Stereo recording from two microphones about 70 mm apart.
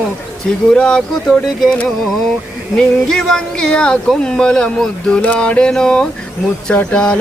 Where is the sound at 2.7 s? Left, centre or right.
Centre.